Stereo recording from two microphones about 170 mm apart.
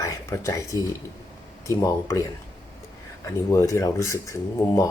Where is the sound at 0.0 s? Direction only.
15° left (ahead or behind).